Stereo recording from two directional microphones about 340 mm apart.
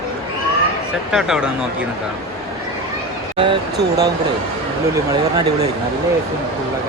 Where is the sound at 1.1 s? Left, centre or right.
Centre.